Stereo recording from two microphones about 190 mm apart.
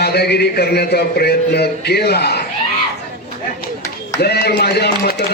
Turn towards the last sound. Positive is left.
turn(degrees=55)  # may be behind; listen again after turning